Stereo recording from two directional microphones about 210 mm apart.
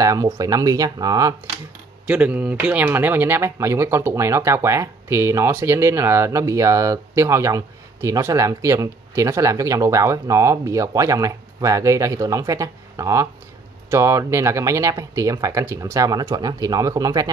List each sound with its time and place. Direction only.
0.0 s speech: 15° right (ahead or behind)
2.0 s speech: 5° right (ahead or behind)